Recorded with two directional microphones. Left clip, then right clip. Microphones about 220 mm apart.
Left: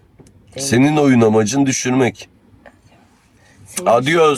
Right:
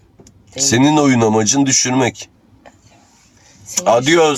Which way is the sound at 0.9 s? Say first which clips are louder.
Even; 25° left (ahead or behind).